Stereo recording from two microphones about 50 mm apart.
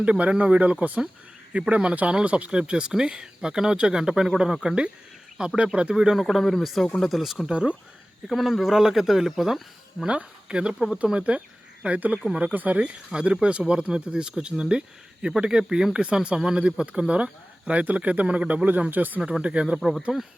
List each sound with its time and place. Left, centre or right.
0.0 s speech: right
6.1 s speech: centre
7.4 s speech: centre
8.3 s speech: centre
10.1 s speech: right
13.1 s speech: centre; by 19.2 s right
19.2 s speech: right
19.6 s speech: centre